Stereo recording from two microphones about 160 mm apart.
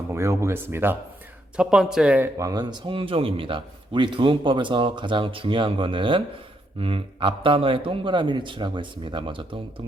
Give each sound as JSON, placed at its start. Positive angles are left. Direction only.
{"t": 0.1, "sound": "speech", "side_deg": -15}
{"t": 1.5, "sound": "speech", "side_deg": -5}
{"t": 2.5, "sound": "a man's voice", "side_deg": -25}